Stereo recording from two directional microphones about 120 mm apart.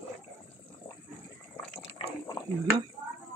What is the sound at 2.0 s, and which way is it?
Boiling, 50° left (ahead or behind).